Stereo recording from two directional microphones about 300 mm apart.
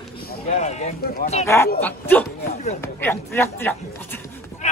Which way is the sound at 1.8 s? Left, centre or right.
Centre.